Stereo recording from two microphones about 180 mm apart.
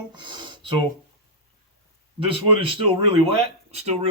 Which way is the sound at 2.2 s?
30° right (ahead or behind).